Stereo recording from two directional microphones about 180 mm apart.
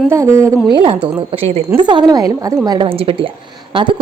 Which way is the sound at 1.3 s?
30° right (ahead or behind).